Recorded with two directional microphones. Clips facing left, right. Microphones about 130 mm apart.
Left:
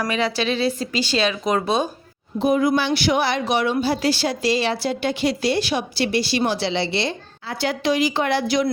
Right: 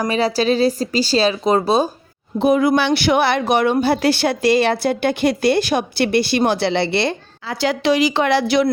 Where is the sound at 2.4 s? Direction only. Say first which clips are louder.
Right 3 dB; 70° right (ahead or behind).